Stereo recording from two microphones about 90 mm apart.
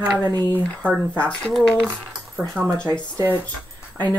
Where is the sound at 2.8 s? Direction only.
55° left (ahead or behind).